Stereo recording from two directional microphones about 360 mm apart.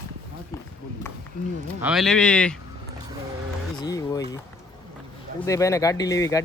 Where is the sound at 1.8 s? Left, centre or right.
Centre.